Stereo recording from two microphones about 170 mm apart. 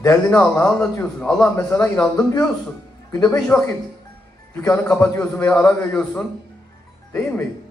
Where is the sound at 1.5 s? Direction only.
15° left (ahead or behind).